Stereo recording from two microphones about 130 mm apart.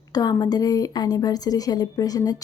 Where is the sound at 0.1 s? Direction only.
30° left (ahead or behind).